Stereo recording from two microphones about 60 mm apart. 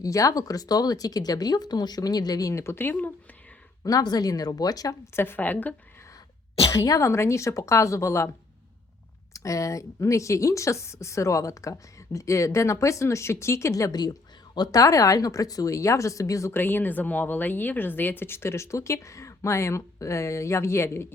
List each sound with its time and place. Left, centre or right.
0.0 s speech: left
2.7 s a woman's voice: left
3.8 s speech: left
5.1 s a woman's voice: left
6.7 s speech: left
7.0 s speech: left
9.3 s speech: left
16.5 s speech: left